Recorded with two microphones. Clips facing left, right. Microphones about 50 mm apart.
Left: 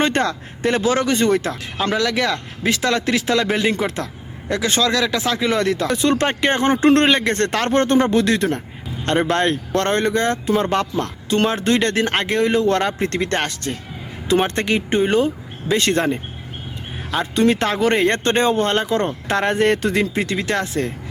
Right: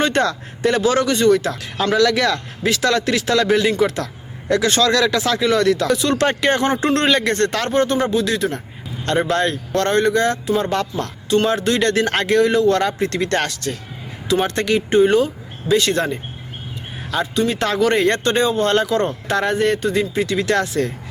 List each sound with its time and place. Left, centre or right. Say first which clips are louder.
0.0 s speech: right 1 dB; left
1.8 s speech: right 3 dB; centre; by 7.7 s left
7.7 s speech: left 4 dB; left
17.3 s speech: left 5 dB; left
17.6 s speech: right 1 dB; left
18.6 s speech: right 2 dB; left
20.3 s speech: right 3 dB; left